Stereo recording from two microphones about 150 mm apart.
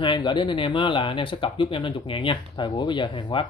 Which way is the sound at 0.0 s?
30° left (ahead or behind).